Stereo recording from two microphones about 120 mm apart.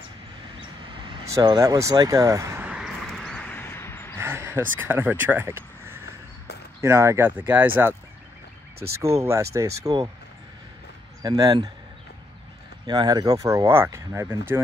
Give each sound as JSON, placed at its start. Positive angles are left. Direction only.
{"t": 0.8, "sound": "vehicle", "side_deg": -45}
{"t": 1.3, "sound": "speech", "side_deg": -30}
{"t": 2.7, "sound": "a sound", "side_deg": 0}
{"t": 3.4, "sound": "a sound", "side_deg": 20}
{"t": 4.2, "sound": "a sound", "side_deg": -20}
{"t": 4.7, "sound": "speech", "side_deg": -20}
{"t": 9.0, "sound": "speech", "side_deg": -25}
{"t": 11.2, "sound": "speech", "side_deg": -35}
{"t": 12.8, "sound": "speech", "side_deg": -35}